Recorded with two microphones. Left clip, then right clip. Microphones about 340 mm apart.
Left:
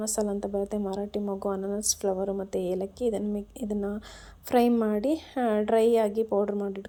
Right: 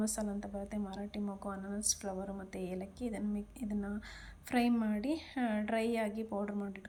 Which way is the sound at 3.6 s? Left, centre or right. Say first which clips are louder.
Left 11 dB; left.